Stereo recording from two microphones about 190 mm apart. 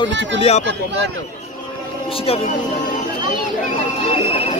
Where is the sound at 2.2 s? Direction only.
30° left (ahead or behind).